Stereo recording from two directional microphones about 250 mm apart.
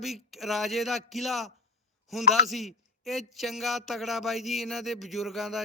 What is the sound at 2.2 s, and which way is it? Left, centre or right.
Speech, left.